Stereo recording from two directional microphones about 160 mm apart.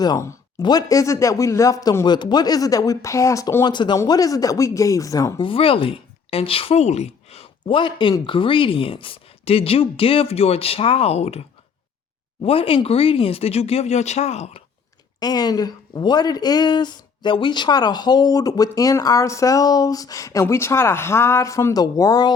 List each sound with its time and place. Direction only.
0.0 s speech: 20° left (ahead or behind)
5.4 s speech: 35° left (ahead or behind)
15.2 s speech: 25° left (ahead or behind)